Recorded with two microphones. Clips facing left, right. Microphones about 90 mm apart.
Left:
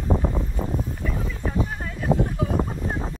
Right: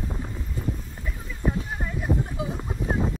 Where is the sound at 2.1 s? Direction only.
90° left.